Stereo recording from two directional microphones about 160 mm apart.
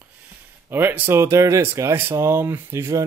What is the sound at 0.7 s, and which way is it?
Speech, 15° right (ahead or behind).